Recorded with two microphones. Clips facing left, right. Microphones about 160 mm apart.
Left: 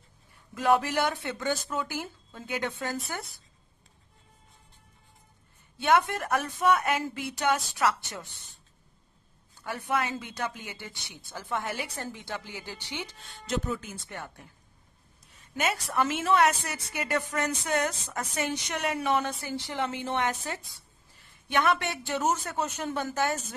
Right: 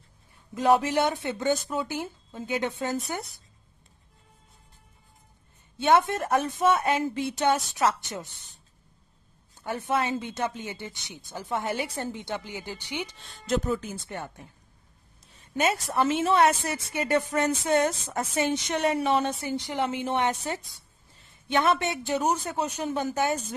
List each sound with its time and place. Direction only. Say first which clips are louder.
0.6 s a woman's voice: right 3 dB; 20° right (ahead or behind)
5.8 s a woman's voice: right 3 dB; 25° right (ahead or behind)
9.6 s a woman's voice: right 3 dB; 20° right (ahead or behind)
13.5 s speech: right 5 dB; 40° right (ahead or behind)
14.0 s a woman's voice: right 4 dB; 25° right (ahead or behind)
15.6 s a woman's voice: right 3 dB; 25° right (ahead or behind)